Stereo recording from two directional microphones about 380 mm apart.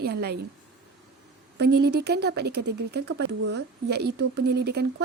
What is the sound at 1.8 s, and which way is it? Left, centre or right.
Speech, right.